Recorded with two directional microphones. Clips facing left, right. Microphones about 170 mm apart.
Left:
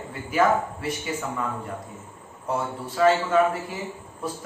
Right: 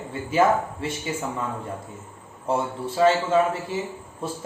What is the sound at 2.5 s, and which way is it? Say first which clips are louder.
A man's voice: right 3 dB; 25° right (ahead or behind).